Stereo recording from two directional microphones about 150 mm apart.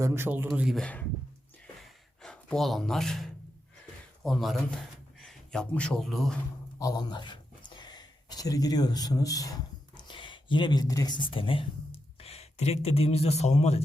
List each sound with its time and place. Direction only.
0.0 s speech: 15° right (ahead or behind)
0.8 s speech: 10° left (ahead or behind)
1.8 s gasp: 5° left (ahead or behind)
4.2 s a man's voice: centre (ahead or behind)
6.7 s speech: 25° left (ahead or behind); by 13.8 s 45° left (ahead or behind)